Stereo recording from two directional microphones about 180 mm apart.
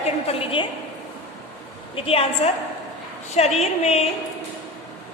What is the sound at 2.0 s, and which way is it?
A woman's voice, 30° left (ahead or behind).